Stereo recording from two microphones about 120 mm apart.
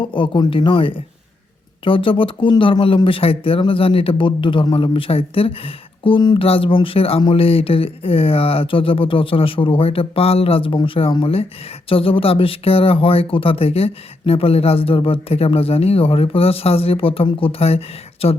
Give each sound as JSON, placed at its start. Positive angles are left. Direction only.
{"t": 0.0, "sound": "speech", "side_deg": 45}